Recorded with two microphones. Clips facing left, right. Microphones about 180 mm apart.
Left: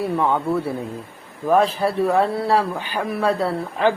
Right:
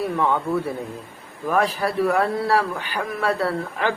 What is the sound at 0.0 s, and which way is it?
Speech, 15° left (ahead or behind).